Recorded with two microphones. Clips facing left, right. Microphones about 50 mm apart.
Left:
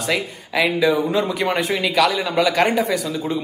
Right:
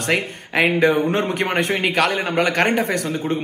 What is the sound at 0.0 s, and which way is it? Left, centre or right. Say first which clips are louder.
Speech: right 1 dB; right.